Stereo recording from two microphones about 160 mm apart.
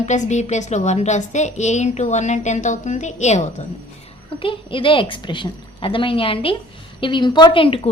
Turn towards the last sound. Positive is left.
turn(degrees=35)  # may be behind; listen again after turning